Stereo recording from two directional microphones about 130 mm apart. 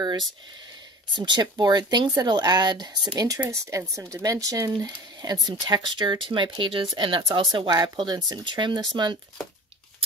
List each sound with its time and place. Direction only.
1.1 s speech: 35° right (ahead or behind)
3.3 s speech: 25° right (ahead or behind)